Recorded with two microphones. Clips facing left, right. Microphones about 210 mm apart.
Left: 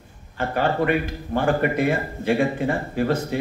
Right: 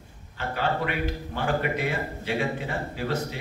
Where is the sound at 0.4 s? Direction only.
50° left (ahead or behind).